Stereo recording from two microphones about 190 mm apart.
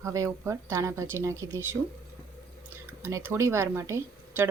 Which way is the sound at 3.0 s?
10° right (ahead or behind).